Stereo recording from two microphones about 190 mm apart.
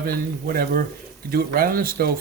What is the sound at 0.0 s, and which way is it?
Speech, 50° right (ahead or behind).